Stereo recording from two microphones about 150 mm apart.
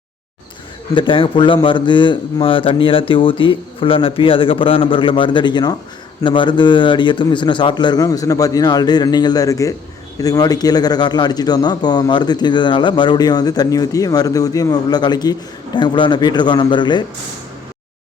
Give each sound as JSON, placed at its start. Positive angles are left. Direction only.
{"t": 0.9, "sound": "a man's voice", "side_deg": 35}